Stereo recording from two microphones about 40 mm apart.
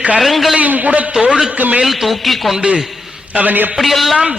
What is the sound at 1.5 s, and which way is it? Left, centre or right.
Speech, right.